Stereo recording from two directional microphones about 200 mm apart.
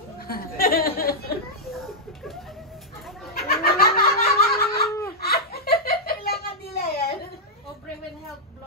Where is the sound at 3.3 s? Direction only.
50° left (ahead or behind).